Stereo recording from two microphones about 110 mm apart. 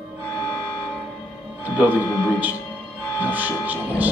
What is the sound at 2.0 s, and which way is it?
Speech, 30° left (ahead or behind).